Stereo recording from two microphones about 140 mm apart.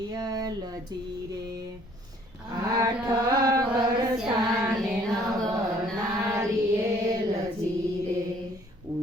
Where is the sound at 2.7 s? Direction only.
25° right (ahead or behind).